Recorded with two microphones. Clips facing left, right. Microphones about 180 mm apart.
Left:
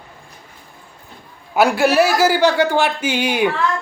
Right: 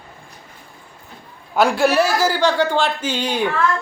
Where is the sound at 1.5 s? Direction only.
5° left (ahead or behind).